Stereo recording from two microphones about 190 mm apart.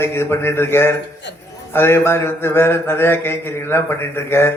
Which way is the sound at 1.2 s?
65° left (ahead or behind).